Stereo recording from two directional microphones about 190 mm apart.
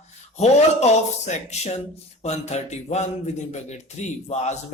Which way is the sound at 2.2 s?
35° left (ahead or behind).